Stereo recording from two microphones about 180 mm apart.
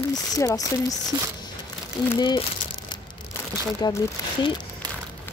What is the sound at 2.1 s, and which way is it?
Speech, 25° left (ahead or behind).